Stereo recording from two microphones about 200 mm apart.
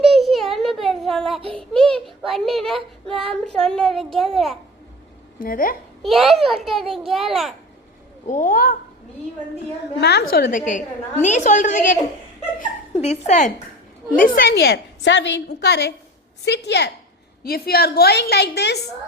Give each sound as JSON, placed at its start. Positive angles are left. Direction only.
{"t": 0.1, "sound": "a sound", "side_deg": 0}
{"t": 1.5, "sound": "a child's voice", "side_deg": 5}
{"t": 5.4, "sound": "a woman's voice", "side_deg": 45}
{"t": 6.0, "sound": "a child's voice", "side_deg": 0}
{"t": 8.3, "sound": "a woman's voice", "side_deg": 40}
{"t": 10.0, "sound": "a woman's voice", "side_deg": 55}
{"t": 10.7, "sound": "a woman's voice", "side_deg": 40}
{"t": 14.2, "sound": "a woman's voice", "side_deg": 45}